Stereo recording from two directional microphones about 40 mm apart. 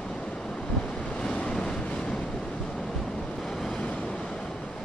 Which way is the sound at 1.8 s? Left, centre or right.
Centre.